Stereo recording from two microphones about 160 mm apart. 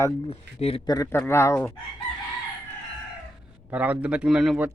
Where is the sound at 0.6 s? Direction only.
40° left (ahead or behind).